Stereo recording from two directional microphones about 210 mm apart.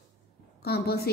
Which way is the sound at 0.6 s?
50° left (ahead or behind).